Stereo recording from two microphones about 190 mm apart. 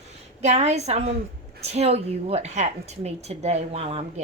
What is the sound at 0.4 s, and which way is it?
A woman's voice, 35° right (ahead or behind).